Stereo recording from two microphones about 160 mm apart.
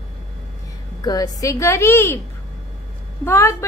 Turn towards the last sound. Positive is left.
turn(degrees=15)  # may be behind; listen again after turning